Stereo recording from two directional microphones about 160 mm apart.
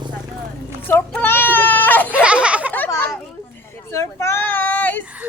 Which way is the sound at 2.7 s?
15° left (ahead or behind).